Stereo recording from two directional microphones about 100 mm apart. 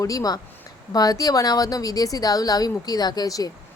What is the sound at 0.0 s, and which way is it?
Speech, 35° left (ahead or behind).